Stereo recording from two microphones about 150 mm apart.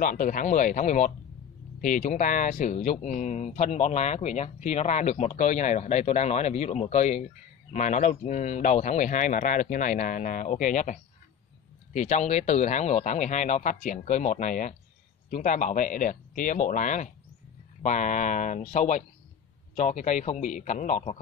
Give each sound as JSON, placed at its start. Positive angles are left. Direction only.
{"t": 0.0, "sound": "speech", "side_deg": 65}